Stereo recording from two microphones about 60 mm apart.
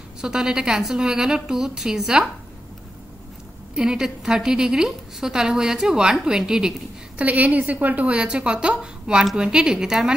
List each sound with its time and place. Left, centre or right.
0.2 s a woman's voice: centre
3.7 s a woman's voice: centre
7.2 s a woman's voice: right; by 10.1 s centre